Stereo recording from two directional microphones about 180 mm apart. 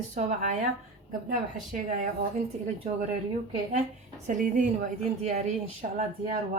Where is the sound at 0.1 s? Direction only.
40° right (ahead or behind).